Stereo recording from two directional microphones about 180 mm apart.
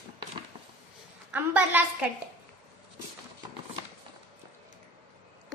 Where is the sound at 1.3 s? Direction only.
10° right (ahead or behind).